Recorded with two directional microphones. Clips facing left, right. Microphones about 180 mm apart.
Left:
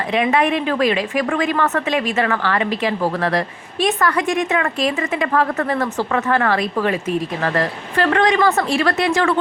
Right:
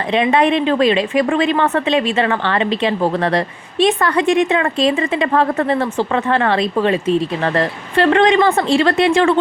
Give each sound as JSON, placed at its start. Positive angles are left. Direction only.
{"t": 0.1, "sound": "a woman's voice", "side_deg": -30}